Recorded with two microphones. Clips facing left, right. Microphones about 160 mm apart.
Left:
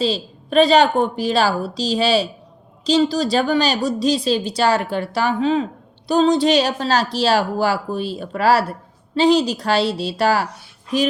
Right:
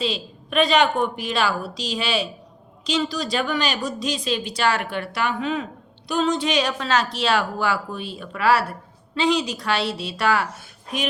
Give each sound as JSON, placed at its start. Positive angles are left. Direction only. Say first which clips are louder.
{"t": 0.0, "sound": "speech", "louder": "left 5 dB", "side_deg": 35}